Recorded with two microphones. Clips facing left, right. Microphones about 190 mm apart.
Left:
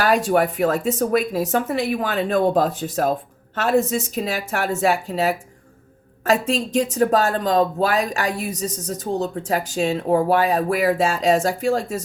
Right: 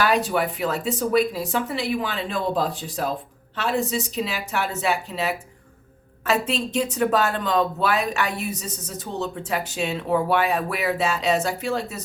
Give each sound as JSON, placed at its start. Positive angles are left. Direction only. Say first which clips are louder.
{"t": 0.3, "sound": "a woman's voice", "louder": "left 5 dB", "side_deg": 45}